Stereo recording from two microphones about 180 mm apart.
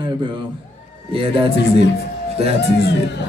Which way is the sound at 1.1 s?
30° right (ahead or behind).